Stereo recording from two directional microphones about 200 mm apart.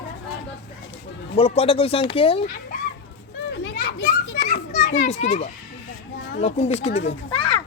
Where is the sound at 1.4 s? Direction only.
30° left (ahead or behind).